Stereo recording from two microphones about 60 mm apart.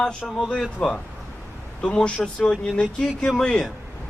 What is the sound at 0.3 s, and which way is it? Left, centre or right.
Speech, centre.